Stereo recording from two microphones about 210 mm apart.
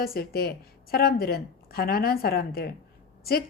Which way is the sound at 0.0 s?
45° left (ahead or behind).